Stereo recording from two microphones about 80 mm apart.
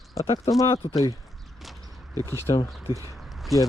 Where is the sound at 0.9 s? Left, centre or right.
Left.